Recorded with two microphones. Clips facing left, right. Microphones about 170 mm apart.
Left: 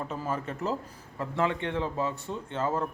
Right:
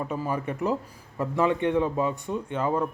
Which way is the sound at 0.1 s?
15° right (ahead or behind).